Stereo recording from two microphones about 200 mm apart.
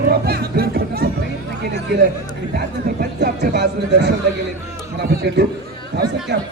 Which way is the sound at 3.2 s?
55° right (ahead or behind).